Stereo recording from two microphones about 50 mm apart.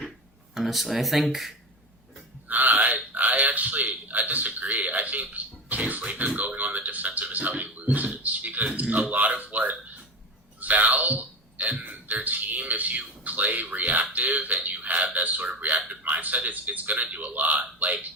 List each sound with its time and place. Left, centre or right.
0.5 s speech: centre
2.5 s a sound: right
8.7 s a man's voice: right